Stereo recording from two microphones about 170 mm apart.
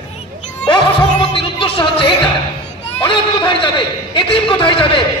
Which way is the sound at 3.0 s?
30° left (ahead or behind).